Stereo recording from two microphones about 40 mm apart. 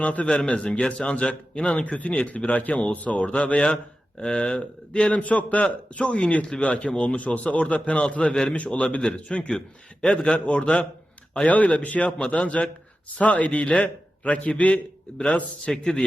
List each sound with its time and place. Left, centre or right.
0.0 s a man's voice: left
0.3 s a man's voice: left
5.1 s a man's voice: left
6.0 s a man's voice: left
7.3 s a man's voice: left; by 8.5 s centre
8.5 s a man's voice: left
9.5 s a man's voice: centre
11.3 s a man's voice: left
12.2 s a man's voice: left
15.6 s a man's voice: left